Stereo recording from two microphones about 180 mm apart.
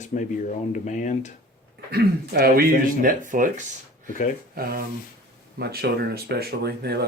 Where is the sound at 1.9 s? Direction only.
60° right (ahead or behind).